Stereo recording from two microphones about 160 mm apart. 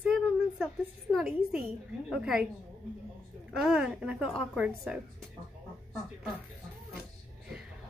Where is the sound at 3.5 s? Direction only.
5° right (ahead or behind).